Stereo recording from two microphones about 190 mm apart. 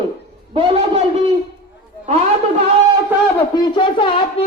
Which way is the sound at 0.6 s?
30° right (ahead or behind).